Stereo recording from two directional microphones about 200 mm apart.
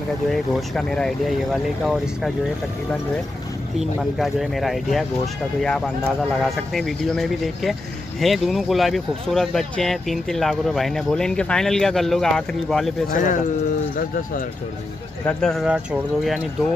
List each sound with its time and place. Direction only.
0.3 s speech: centre (ahead or behind)
3.8 s speech: centre (ahead or behind)
13.1 s speech: 40° left (ahead or behind)
15.2 s speech: centre (ahead or behind)